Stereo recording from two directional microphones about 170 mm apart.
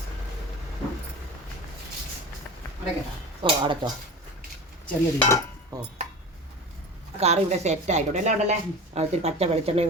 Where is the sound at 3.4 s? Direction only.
30° right (ahead or behind).